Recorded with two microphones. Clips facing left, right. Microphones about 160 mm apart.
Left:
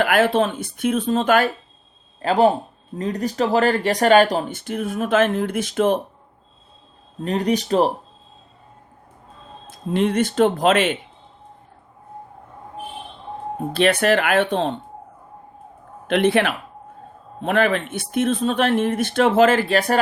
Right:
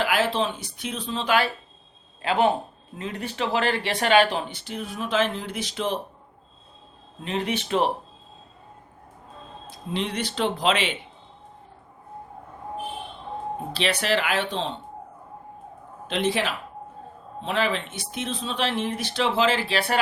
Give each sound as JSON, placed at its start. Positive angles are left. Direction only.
{"t": 0.0, "sound": "speech", "side_deg": 55}
{"t": 7.2, "sound": "speech", "side_deg": 40}
{"t": 9.6, "sound": "speech", "side_deg": 50}
{"t": 13.7, "sound": "speech", "side_deg": 50}
{"t": 16.0, "sound": "speech", "side_deg": 60}